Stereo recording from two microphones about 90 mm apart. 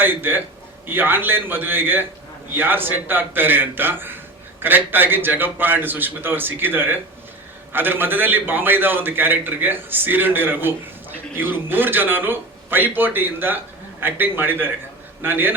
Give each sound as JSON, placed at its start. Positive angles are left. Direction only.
{"t": 0.0, "sound": "a man's voice", "side_deg": -20}